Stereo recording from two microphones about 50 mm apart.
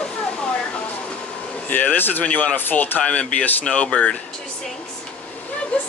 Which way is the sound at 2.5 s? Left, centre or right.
Left.